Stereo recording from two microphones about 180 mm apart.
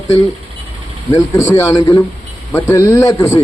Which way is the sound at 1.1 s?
20° left (ahead or behind).